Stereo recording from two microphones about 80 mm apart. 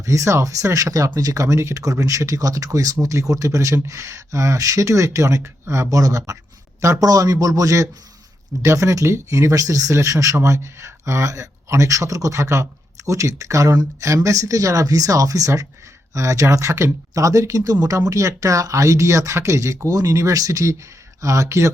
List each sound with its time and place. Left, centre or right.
0.0 s speech: right